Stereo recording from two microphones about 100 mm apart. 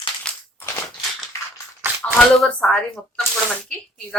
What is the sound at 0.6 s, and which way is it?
Crushing, 30° left (ahead or behind).